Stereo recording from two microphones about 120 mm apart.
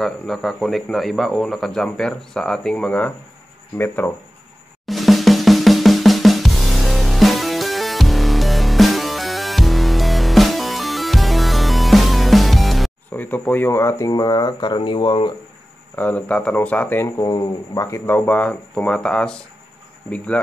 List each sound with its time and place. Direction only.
0.0 s a man's voice: centre (ahead or behind); by 4.1 s 15° left (ahead or behind)
4.8 s drum: centre (ahead or behind)
13.1 s speech: 15° left (ahead or behind); by 15.3 s 45° left (ahead or behind)
16.0 s speech: 10° left (ahead or behind)